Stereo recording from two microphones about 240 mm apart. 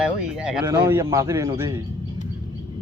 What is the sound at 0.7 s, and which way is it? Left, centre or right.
A man's voice, centre.